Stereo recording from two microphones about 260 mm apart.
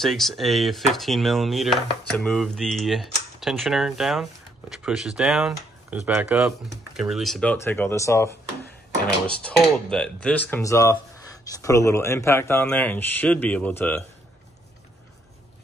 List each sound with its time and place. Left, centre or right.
0.0 s speech: centre
9.4 s speech: centre